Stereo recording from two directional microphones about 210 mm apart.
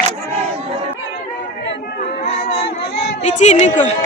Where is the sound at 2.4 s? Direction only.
50° left (ahead or behind).